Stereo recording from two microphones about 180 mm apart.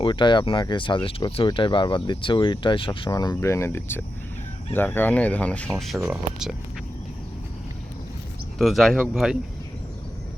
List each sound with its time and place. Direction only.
0.0 s speech: 25° left (ahead or behind); by 6.6 s 5° right (ahead or behind)
8.5 s speech: centre (ahead or behind)